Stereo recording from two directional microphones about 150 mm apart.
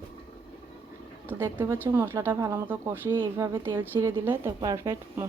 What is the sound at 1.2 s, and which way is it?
Speech, 15° right (ahead or behind).